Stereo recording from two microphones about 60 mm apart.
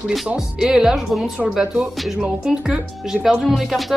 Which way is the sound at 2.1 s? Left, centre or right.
Centre.